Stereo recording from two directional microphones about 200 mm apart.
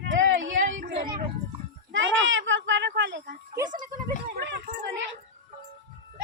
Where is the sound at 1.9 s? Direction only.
75° right (ahead or behind).